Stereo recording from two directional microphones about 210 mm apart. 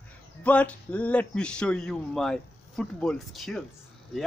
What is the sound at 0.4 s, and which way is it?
A man's voice, 5° left (ahead or behind).